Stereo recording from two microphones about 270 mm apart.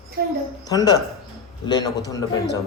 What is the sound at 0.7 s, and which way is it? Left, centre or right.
Speech, centre.